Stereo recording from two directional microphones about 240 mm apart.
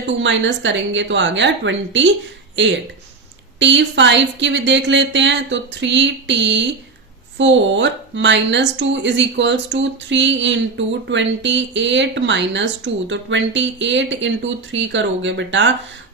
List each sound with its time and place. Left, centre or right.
0.2 s speech: right